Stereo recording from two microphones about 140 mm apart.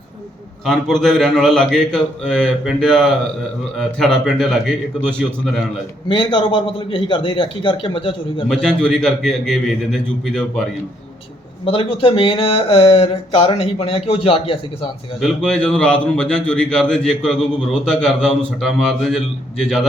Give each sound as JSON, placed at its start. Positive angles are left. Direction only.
{"t": 0.6, "sound": "speech", "side_deg": 0}
{"t": 6.1, "sound": "speech", "side_deg": 35}
{"t": 8.4, "sound": "speech", "side_deg": 5}
{"t": 11.6, "sound": "speech", "side_deg": 40}
{"t": 15.2, "sound": "speech", "side_deg": 5}